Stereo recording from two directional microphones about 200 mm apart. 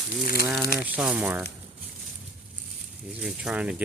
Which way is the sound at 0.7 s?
5° right (ahead or behind).